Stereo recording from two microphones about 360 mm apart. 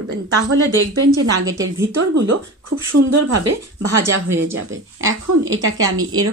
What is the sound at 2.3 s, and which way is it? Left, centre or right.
Speech, right.